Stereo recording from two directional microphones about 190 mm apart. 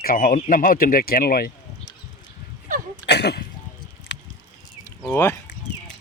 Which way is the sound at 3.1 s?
60° left (ahead or behind).